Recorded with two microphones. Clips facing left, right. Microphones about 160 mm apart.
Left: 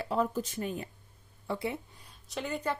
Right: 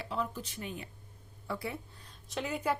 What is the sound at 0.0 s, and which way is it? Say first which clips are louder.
Speech: left 6 dB; 45° left (ahead or behind).